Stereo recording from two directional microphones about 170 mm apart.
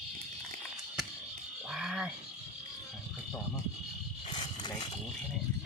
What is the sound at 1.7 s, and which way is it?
Roaring cats, 5° right (ahead or behind).